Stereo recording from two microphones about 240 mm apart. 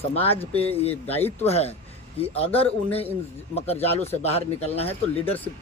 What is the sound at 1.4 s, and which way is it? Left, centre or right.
Speech, left.